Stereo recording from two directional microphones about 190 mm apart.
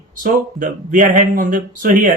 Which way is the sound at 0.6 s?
45° right (ahead or behind).